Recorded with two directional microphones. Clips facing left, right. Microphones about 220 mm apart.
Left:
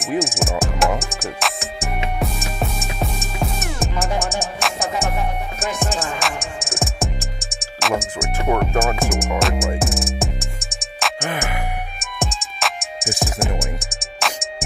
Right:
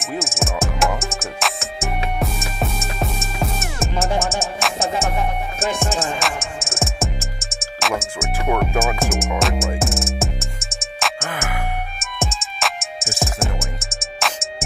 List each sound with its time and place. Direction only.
0.2 s music: centre (ahead or behind)
11.1 s music: 15° left (ahead or behind)
12.0 s music: centre (ahead or behind)